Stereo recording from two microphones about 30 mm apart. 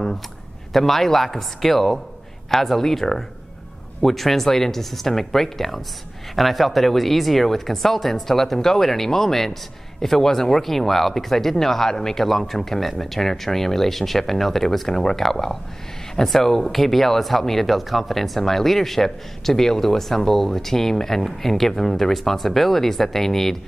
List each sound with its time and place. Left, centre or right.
0.7 s speech: centre
12.3 s speech: centre